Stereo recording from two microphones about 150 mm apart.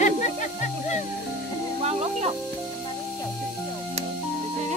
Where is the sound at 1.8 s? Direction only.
45° right (ahead or behind).